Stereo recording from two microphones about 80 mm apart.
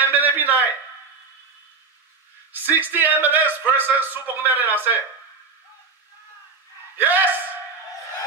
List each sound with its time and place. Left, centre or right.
0.0 s a sound: right
2.5 s speech: right
7.0 s speech: right